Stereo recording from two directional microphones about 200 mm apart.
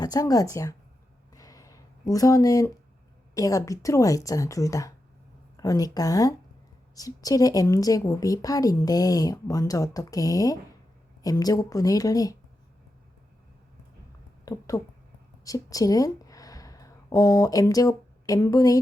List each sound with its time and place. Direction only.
0.0 s speech: 20° left (ahead or behind)
1.3 s a sound: 15° left (ahead or behind)
3.3 s speech: 15° left (ahead or behind)
14.4 s speech: 15° left (ahead or behind)